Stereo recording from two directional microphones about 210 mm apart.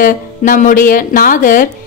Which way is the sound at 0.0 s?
40° left (ahead or behind).